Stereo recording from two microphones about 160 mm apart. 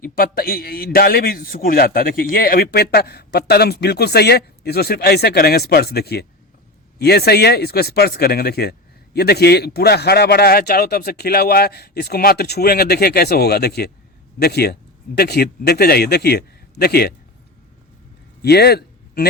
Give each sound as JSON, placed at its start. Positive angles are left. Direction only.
{"t": 0.0, "sound": "a man's voice", "side_deg": 65}
{"t": 9.1, "sound": "a man's voice", "side_deg": 90}
{"t": 18.4, "sound": "speech", "side_deg": 85}